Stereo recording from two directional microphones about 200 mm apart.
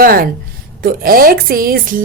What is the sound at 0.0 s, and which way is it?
A woman's voice, 45° right (ahead or behind).